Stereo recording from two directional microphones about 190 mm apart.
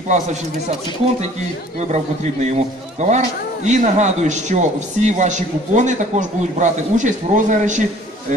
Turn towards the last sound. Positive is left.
turn(degrees=-40)  # may be behind; listen again after turning